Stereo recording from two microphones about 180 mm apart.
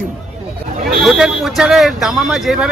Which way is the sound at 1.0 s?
Centre (ahead or behind).